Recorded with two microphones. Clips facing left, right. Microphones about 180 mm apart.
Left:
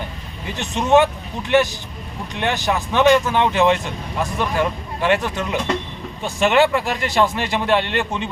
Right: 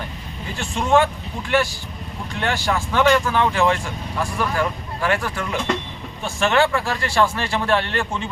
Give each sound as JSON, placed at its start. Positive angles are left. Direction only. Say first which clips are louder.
{"t": 0.5, "sound": "speech", "louder": "left 3 dB", "side_deg": 20}